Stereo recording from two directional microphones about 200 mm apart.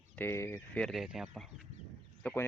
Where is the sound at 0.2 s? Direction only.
10° left (ahead or behind).